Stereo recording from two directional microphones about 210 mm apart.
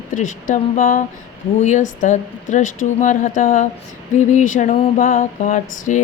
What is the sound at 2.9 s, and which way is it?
A woman's voice, 35° left (ahead or behind).